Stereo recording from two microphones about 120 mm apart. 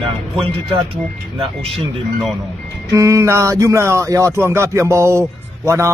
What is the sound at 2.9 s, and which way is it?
Speech, 25° right (ahead or behind).